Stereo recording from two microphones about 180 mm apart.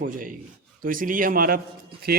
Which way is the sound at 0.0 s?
50° right (ahead or behind).